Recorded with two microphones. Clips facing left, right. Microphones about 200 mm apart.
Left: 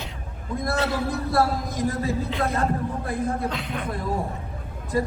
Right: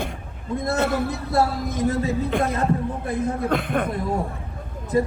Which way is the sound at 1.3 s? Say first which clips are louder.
Right 1 dB; 25° right (ahead or behind).